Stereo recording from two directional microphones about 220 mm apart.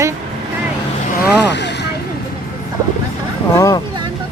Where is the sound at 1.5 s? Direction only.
50° left (ahead or behind).